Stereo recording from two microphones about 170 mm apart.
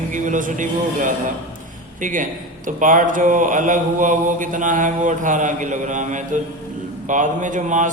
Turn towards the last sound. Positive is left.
turn(degrees=-50)  # may be behind; listen again after turning